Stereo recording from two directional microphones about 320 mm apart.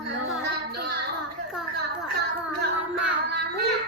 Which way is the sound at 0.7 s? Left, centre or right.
Right.